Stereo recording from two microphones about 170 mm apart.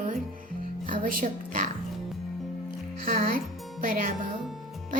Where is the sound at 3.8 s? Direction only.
55° right (ahead or behind).